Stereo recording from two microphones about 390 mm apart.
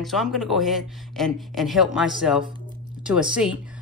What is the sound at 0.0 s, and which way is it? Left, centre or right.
A woman's voice, centre.